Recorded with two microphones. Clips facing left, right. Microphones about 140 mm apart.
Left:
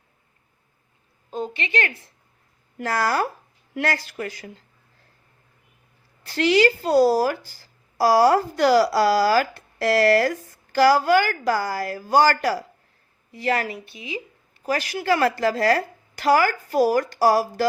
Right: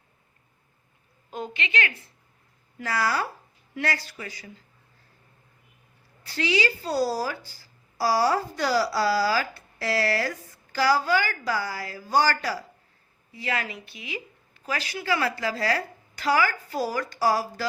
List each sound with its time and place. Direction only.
1.3 s a woman's voice: 35° left (ahead or behind)
3.8 s speech: 55° left (ahead or behind)
6.3 s speech: 50° left (ahead or behind)
13.9 s speech: 30° left (ahead or behind)
14.7 s speech: 45° left (ahead or behind)